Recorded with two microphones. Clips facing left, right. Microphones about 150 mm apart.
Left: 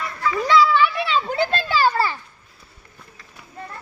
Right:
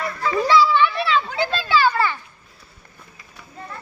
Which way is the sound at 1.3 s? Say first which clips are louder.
Even; 50° left (ahead or behind).